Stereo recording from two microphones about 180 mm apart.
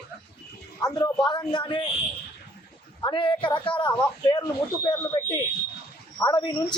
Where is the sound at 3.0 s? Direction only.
30° left (ahead or behind).